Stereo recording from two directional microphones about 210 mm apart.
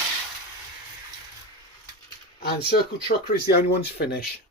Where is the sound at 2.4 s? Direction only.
50° left (ahead or behind).